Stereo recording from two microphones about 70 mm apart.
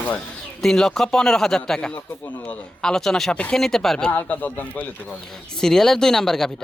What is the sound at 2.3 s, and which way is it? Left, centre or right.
Speech, left.